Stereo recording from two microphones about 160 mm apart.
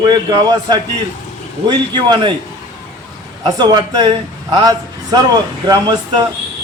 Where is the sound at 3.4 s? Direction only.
25° right (ahead or behind).